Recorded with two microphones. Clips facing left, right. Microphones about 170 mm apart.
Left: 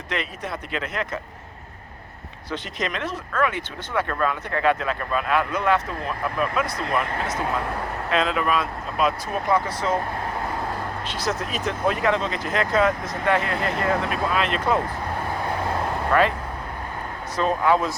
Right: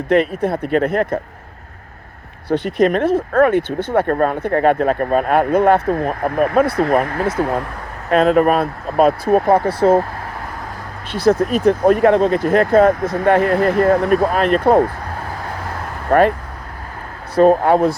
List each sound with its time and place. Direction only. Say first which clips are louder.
0.1 s speech: right 14 dB; 55° right (ahead or behind)
2.5 s speech: right 14 dB; 55° right (ahead or behind)
11.1 s speech: right 15 dB; 55° right (ahead or behind)
16.1 s speech: right 7 dB; 45° right (ahead or behind)
17.3 s speech: right 9 dB; 55° right (ahead or behind)